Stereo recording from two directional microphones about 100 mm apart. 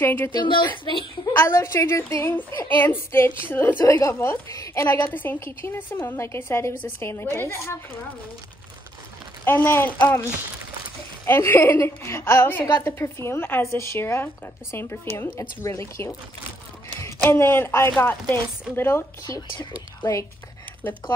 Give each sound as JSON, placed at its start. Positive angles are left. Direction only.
{"t": 0.0, "sound": "a woman's voice", "side_deg": 20}
{"t": 0.3, "sound": "a woman's voice", "side_deg": 50}
{"t": 1.3, "sound": "a woman's voice", "side_deg": 25}
{"t": 9.4, "sound": "a woman's voice", "side_deg": 20}
{"t": 11.2, "sound": "a woman's voice", "side_deg": 25}
{"t": 17.2, "sound": "a woman's voice", "side_deg": 25}
{"t": 19.5, "sound": "speech", "side_deg": 40}